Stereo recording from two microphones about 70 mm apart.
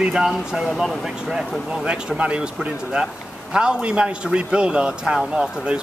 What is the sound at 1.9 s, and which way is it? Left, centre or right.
A man's voice, centre.